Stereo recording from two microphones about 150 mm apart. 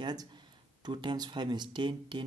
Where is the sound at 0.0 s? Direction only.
25° right (ahead or behind).